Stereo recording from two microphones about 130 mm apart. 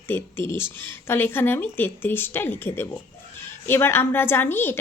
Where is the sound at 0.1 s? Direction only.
20° left (ahead or behind).